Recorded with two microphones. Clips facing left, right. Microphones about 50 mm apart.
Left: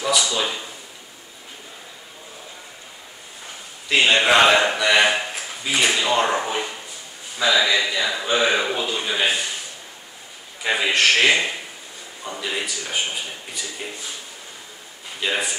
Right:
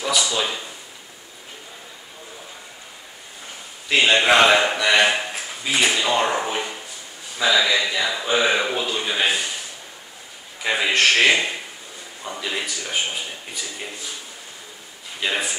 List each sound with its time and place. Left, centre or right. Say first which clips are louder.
0.0 s a sound: left 1 dB; centre
3.9 s speech: even; centre
5.9 s a sound: left 1 dB; centre
7.4 s speech: even; centre
10.6 s a man's voice: even; centre
15.1 s a man's voice: even; centre